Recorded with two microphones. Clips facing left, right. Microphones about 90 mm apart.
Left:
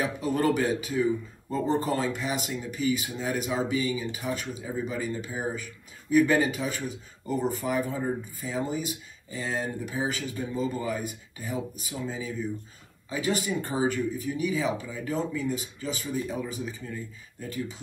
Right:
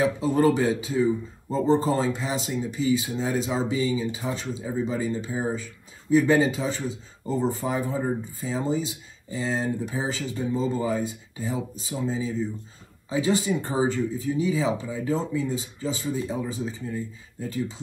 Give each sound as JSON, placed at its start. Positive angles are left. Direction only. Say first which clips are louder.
{"t": 0.0, "sound": "speech", "louder": "right 5 dB", "side_deg": -20}